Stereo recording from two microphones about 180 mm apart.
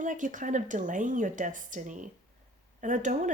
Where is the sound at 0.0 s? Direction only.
45° right (ahead or behind).